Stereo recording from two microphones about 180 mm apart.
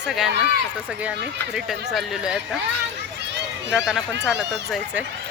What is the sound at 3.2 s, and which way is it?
Run, 75° right (ahead or behind).